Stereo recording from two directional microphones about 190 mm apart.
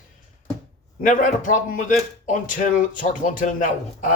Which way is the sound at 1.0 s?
45° left (ahead or behind).